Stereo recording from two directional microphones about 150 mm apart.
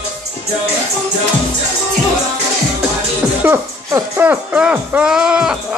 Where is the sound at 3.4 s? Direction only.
15° right (ahead or behind).